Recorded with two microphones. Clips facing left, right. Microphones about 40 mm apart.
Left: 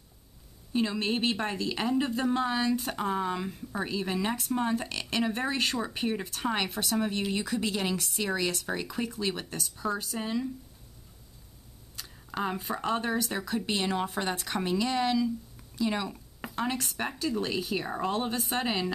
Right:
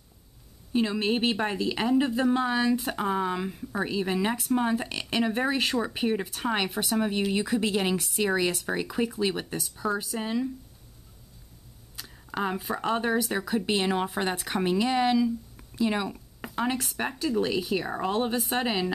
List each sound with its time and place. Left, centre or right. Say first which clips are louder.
0.7 s a woman's voice: right 3 dB; centre
12.0 s a woman's voice: right 2 dB; centre
16.3 s a sound: right 2 dB; centre
16.6 s a woman's voice: right 3 dB; centre